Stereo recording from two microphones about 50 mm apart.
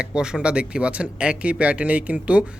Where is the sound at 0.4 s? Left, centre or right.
Right.